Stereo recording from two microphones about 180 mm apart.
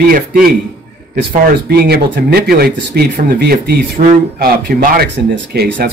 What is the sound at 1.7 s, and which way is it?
Speech, 60° right (ahead or behind).